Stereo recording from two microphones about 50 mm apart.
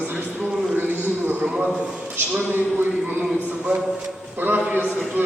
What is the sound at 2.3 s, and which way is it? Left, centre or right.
Speech, right.